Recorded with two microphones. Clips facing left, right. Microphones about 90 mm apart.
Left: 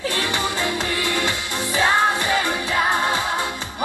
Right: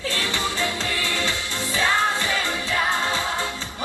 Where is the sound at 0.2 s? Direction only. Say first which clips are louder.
Left 2 dB; 20° left (ahead or behind).